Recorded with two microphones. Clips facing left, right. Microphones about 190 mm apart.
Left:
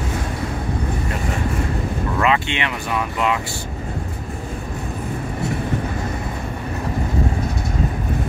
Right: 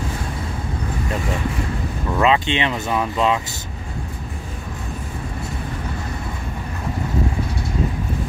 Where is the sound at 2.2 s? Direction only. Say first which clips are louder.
Right 4 dB; 20° right (ahead or behind).